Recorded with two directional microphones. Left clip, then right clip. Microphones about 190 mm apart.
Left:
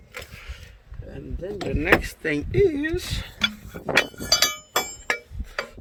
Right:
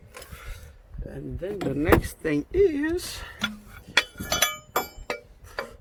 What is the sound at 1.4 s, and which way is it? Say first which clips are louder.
Speech: even; 10° right (ahead or behind).